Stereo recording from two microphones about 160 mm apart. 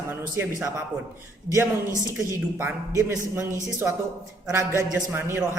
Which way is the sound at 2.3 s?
15° right (ahead or behind).